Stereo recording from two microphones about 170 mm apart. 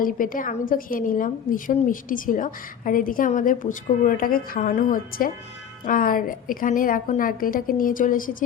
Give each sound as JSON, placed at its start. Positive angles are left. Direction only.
{"t": 0.0, "sound": "a woman's voice", "side_deg": 55}